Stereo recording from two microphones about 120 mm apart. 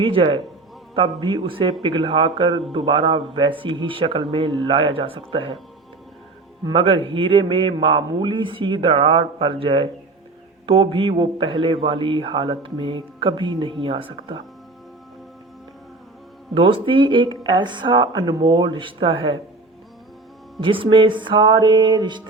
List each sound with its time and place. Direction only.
0.0 s a man's voice: 45° right (ahead or behind)
6.7 s a man's voice: 50° right (ahead or behind)
16.6 s a man's voice: 45° right (ahead or behind)
20.6 s music: 45° right (ahead or behind)